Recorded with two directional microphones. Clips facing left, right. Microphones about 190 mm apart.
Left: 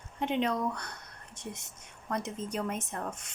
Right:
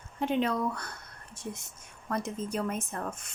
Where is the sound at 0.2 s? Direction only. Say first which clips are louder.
Right 1 dB; 20° left (ahead or behind).